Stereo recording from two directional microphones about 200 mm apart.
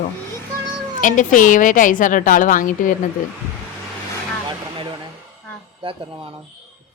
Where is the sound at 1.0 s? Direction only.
40° left (ahead or behind).